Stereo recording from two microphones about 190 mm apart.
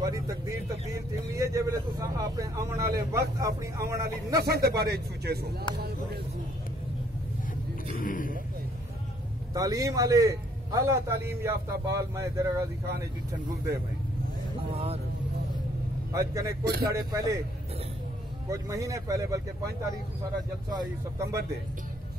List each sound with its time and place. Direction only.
0.0 s speech: 15° right (ahead or behind)
4.5 s speech: 55° right (ahead or behind)
7.9 s speech: 45° left (ahead or behind)
9.5 s speech: 20° right (ahead or behind)
14.7 s speech: 30° right (ahead or behind)
16.1 s speech: 15° right (ahead or behind)
18.5 s speech: 15° right (ahead or behind)
20.7 s speech: 20° right (ahead or behind)